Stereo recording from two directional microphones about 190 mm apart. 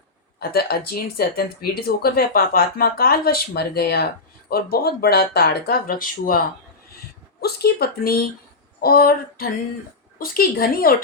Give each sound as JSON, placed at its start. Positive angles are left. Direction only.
{"t": 0.3, "sound": "speech", "side_deg": 55}
{"t": 7.4, "sound": "speech", "side_deg": 55}